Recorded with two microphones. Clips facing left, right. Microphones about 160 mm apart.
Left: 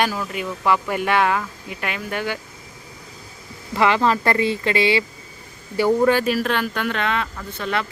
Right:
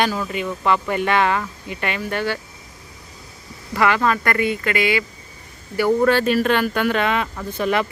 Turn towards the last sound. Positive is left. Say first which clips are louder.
# right 5 dB
turn(degrees=-15)  # may be behind; listen again after turning